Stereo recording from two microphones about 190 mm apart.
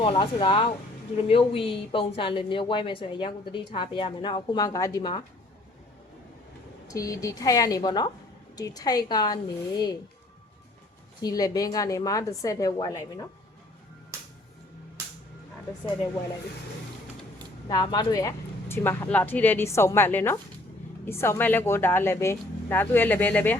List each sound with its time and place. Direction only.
0.0 s a woman's voice: 25° left (ahead or behind)
6.8 s a woman's voice: 20° left (ahead or behind)
11.2 s a woman's voice: 20° left (ahead or behind)
17.7 s a woman's voice: 20° left (ahead or behind)